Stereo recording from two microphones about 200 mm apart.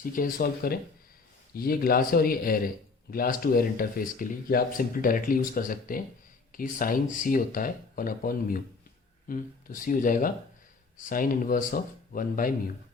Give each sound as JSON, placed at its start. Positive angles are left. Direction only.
{"t": 0.0, "sound": "speech", "side_deg": 45}